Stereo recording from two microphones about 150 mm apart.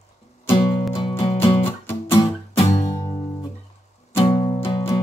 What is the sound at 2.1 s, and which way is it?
Music, 30° left (ahead or behind).